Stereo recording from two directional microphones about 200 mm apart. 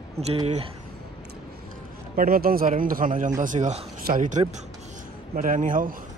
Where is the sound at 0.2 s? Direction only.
30° right (ahead or behind).